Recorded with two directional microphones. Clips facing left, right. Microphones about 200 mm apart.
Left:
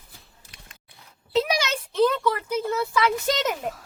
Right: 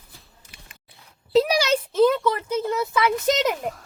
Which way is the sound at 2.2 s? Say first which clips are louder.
Right 1 dB; 20° right (ahead or behind).